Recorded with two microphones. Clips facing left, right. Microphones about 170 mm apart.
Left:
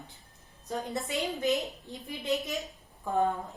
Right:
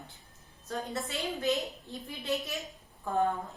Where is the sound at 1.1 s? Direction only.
15° left (ahead or behind).